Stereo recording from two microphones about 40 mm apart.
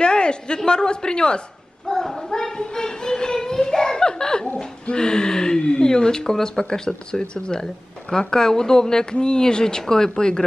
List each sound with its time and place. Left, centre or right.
0.0 s a sound: left
0.6 s speech: centre
1.9 s child singing: centre
4.9 s speech: left